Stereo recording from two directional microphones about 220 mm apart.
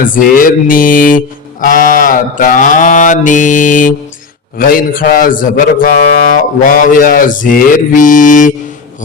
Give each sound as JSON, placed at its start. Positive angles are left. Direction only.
{"t": 0.0, "sound": "mantra", "side_deg": 40}